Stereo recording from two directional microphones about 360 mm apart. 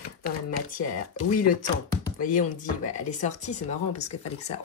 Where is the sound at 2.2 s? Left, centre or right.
Left.